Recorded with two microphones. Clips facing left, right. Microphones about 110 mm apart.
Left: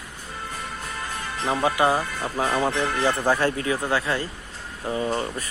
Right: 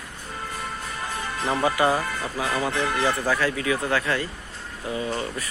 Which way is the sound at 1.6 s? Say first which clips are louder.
Left 1 dB; 20° left (ahead or behind).